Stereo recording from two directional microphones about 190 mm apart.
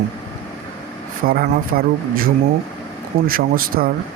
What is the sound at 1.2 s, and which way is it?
Speech, 50° right (ahead or behind).